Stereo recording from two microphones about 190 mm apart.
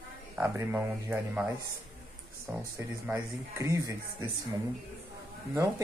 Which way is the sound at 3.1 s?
15° right (ahead or behind).